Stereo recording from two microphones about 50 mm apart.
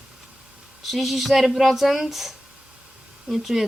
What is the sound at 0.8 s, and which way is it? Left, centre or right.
Speech, centre.